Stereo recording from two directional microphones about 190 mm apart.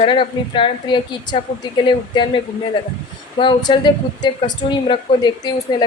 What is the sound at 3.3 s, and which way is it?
A woman's voice, 25° left (ahead or behind).